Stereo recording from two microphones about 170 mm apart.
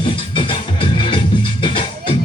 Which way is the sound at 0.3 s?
30° left (ahead or behind).